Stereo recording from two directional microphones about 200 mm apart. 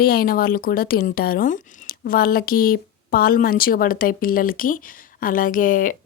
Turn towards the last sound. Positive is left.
turn(degrees=40)  # may be behind; listen again after turning